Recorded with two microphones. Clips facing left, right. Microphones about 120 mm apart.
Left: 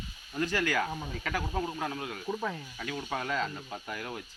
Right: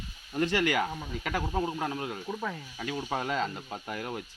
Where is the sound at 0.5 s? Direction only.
20° right (ahead or behind).